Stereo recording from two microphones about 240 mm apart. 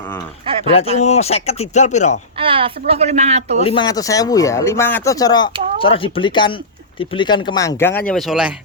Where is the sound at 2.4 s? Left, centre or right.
Right.